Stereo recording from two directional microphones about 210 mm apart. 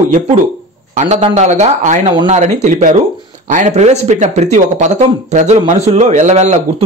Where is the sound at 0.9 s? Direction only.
35° right (ahead or behind).